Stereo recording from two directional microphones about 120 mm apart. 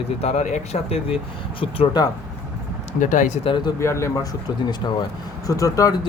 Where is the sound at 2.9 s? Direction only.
90° left.